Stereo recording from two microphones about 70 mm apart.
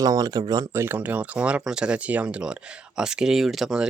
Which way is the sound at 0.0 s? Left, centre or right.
Right.